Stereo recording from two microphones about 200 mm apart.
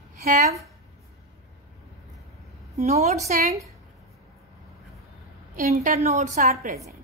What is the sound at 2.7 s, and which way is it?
Speech, 35° right (ahead or behind).